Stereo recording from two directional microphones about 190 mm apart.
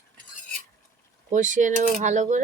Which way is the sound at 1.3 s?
40° right (ahead or behind).